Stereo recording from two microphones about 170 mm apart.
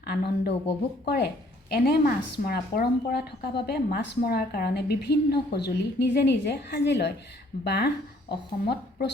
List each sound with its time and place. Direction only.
0.0 s a woman's voice: 70° left (ahead or behind)